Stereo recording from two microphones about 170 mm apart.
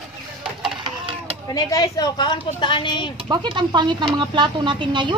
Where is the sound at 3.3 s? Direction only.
25° right (ahead or behind).